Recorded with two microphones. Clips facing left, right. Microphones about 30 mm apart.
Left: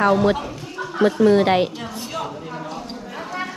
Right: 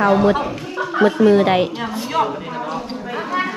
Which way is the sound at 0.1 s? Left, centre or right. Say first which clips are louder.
Right 3 dB; right.